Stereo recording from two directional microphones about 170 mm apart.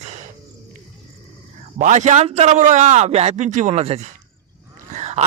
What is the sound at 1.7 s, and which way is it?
Speech, 45° right (ahead or behind).